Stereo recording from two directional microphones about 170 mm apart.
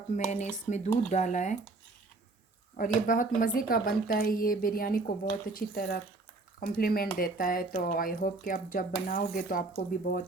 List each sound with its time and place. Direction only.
0.3 s speech: 45° left (ahead or behind)
2.7 s a woman's voice: 55° left (ahead or behind)